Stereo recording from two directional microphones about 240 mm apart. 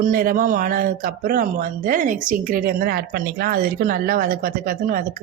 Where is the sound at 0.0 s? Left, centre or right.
Right.